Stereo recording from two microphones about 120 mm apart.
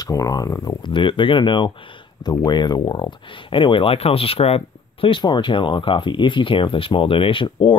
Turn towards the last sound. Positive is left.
turn(degrees=45)  # may be behind; listen again after turning